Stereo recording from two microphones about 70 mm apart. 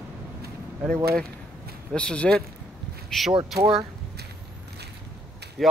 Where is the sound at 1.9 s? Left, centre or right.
Centre.